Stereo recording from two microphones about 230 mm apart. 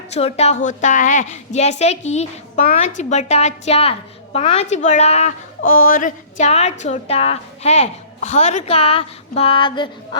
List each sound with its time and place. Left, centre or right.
0.1 s a woman's voice: left